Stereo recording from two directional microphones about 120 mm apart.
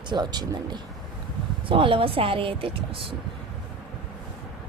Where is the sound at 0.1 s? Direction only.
35° right (ahead or behind).